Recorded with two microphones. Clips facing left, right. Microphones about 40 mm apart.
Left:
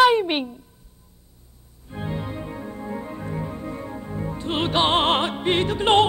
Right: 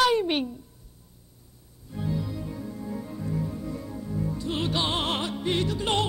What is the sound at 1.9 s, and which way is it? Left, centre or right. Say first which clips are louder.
Organ: left 1 dB; left.